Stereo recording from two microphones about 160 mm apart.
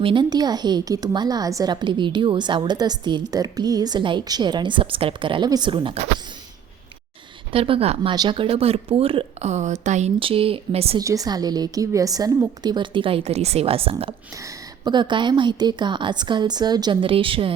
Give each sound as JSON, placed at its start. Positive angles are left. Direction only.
{"t": 0.0, "sound": "speech", "side_deg": -30}
{"t": 7.5, "sound": "speech", "side_deg": -35}
{"t": 10.2, "sound": "speech", "side_deg": -35}
{"t": 10.9, "sound": "speech", "side_deg": -20}
{"t": 14.3, "sound": "speech", "side_deg": -25}